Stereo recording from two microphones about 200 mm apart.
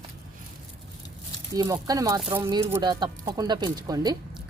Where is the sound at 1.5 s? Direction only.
15° right (ahead or behind).